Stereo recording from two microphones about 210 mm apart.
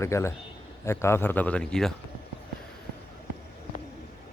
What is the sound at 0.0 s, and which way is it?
Speech, 15° left (ahead or behind).